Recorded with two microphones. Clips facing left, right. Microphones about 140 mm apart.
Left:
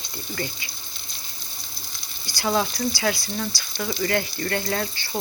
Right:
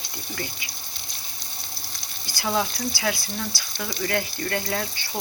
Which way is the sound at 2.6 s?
5° right (ahead or behind).